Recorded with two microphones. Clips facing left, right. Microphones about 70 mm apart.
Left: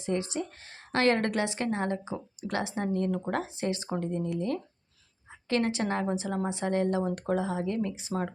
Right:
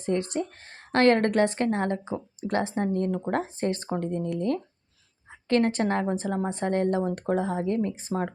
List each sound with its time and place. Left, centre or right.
0.0 s a woman's voice: right